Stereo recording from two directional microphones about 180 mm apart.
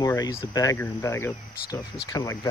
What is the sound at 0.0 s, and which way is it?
Speech, 20° left (ahead or behind).